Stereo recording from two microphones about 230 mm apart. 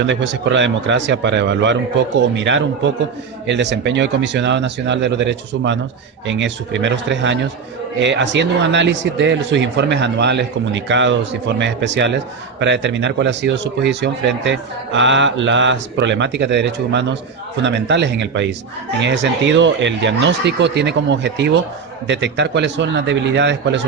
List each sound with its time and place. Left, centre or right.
0.0 s speech: right